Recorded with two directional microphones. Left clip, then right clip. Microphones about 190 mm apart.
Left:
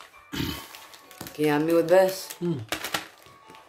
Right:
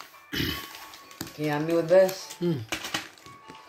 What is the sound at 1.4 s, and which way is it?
Speech, 45° left (ahead or behind).